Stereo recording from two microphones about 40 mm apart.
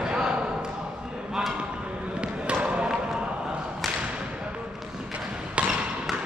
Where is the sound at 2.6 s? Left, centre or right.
Right.